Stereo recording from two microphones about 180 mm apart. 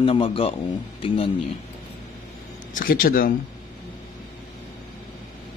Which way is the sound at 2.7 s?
50° left (ahead or behind).